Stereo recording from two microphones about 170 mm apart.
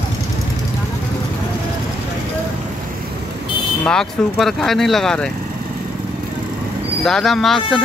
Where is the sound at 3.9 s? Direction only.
Centre (ahead or behind).